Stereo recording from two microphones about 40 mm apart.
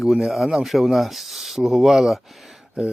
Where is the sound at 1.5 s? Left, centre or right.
Centre.